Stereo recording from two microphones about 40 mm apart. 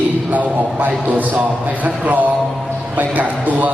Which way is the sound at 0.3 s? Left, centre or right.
Right.